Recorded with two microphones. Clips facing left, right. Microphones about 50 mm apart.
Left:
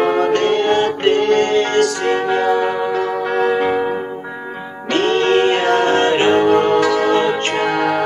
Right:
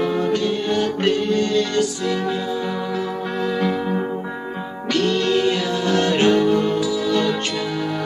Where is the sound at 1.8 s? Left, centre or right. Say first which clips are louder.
Left 5 dB; left.